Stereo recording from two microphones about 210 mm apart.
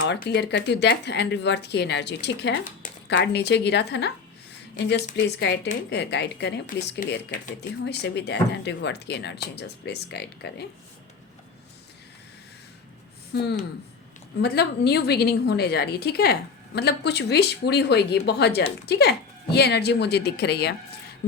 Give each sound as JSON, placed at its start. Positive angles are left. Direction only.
{"t": 0.0, "sound": "a woman's voice", "side_deg": 50}
{"t": 7.9, "sound": "a woman's voice", "side_deg": 55}
{"t": 13.3, "sound": "a woman's voice", "side_deg": 50}